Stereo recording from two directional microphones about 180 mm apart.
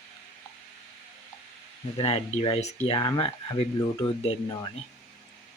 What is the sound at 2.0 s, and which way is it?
Speech, 30° left (ahead or behind).